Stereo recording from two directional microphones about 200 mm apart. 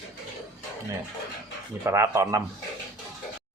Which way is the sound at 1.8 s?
15° right (ahead or behind).